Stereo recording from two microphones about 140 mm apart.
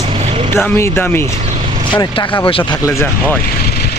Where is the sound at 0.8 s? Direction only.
15° left (ahead or behind).